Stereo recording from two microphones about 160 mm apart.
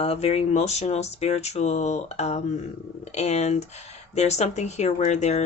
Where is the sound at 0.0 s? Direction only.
40° left (ahead or behind).